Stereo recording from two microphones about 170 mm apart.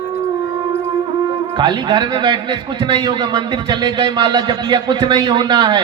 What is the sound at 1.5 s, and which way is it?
A man's voice, 25° right (ahead or behind).